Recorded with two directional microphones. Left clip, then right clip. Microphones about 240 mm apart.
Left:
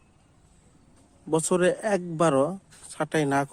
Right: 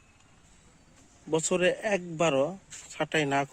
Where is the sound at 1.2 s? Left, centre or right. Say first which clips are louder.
Left 3 dB; centre.